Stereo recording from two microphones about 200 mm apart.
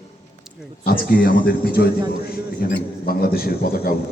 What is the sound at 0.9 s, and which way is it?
A man's voice, 45° left (ahead or behind).